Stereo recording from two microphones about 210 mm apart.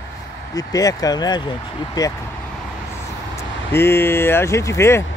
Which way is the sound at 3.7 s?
10° left (ahead or behind).